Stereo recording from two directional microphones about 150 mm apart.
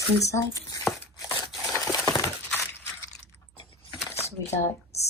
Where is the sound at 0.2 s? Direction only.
20° left (ahead or behind).